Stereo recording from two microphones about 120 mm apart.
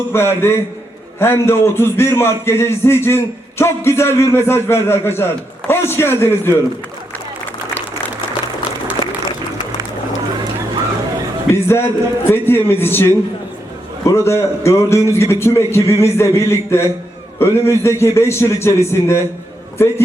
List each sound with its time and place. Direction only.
0.1 s a man's voice: 20° left (ahead or behind)
9.0 s a sound: 40° left (ahead or behind)
11.5 s a man's voice: 20° left (ahead or behind)